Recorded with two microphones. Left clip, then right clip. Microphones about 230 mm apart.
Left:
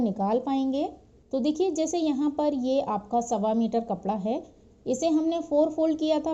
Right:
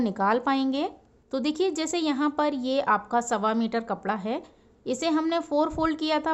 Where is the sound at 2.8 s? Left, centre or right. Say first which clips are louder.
Right 3 dB; right.